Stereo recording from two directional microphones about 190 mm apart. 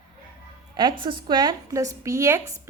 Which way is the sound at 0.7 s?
25° right (ahead or behind).